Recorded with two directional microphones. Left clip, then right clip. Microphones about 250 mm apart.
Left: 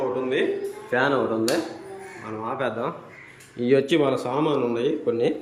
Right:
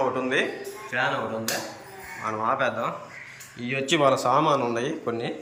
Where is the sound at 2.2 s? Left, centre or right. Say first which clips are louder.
Right 4 dB; centre.